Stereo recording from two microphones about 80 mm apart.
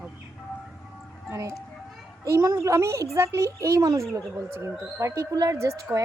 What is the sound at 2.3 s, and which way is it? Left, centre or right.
A woman's voice, right.